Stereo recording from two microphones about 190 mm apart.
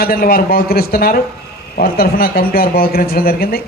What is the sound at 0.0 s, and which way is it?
Speech, 50° left (ahead or behind).